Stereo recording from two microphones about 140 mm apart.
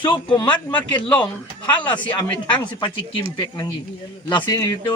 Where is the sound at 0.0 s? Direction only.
35° left (ahead or behind).